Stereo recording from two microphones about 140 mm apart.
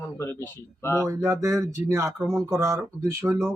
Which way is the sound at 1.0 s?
15° right (ahead or behind).